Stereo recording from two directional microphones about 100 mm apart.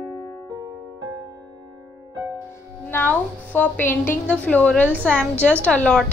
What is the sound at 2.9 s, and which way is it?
A woman's voice, 20° left (ahead or behind).